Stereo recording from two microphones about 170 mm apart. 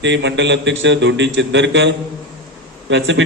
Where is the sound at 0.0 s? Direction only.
90° right.